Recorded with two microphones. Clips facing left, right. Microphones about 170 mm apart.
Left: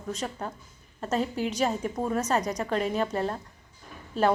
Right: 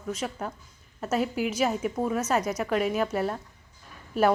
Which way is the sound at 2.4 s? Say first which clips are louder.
Right 1 dB; 35° left (ahead or behind).